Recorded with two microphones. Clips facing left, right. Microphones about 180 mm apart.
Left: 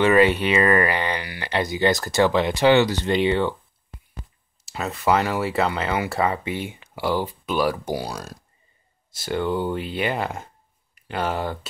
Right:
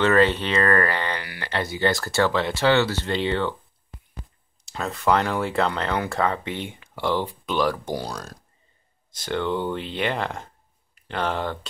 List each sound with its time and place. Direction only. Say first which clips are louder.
0.0 s speech: left 2 dB; 10° left (ahead or behind)
4.6 s speech: left 1 dB; 5° left (ahead or behind)